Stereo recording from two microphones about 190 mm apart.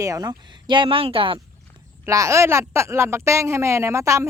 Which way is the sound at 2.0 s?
15° right (ahead or behind).